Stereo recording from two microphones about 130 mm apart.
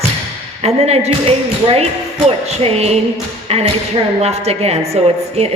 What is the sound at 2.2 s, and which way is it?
A woman's voice, 50° right (ahead or behind).